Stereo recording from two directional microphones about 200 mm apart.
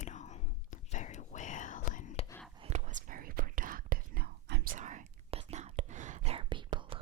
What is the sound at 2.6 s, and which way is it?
Whispering, 35° right (ahead or behind).